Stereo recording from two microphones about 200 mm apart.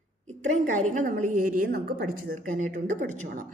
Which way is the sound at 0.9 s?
40° right (ahead or behind).